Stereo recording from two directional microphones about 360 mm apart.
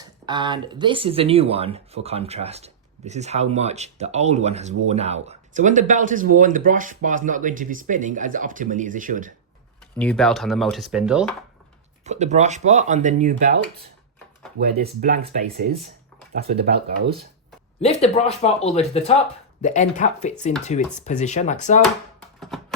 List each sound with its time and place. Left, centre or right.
0.3 s speech: centre
10.0 s speech: centre
12.0 s speech: centre
14.8 s speech: right
17.7 s a man's voice: centre
22.4 s a sound: centre